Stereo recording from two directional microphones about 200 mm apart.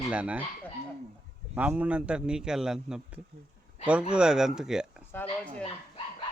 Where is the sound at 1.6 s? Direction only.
5° right (ahead or behind).